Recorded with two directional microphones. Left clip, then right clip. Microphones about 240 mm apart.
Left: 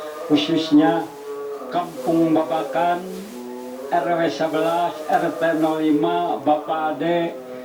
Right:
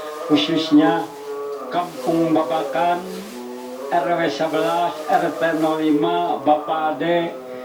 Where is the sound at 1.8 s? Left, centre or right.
Right.